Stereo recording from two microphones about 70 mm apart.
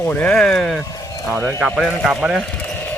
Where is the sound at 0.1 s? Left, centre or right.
Centre.